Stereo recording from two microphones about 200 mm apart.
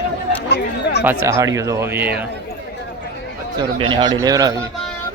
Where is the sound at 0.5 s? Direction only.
55° left (ahead or behind).